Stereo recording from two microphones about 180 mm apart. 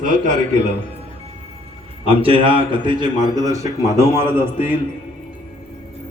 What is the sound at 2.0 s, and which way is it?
A man's voice, 30° right (ahead or behind).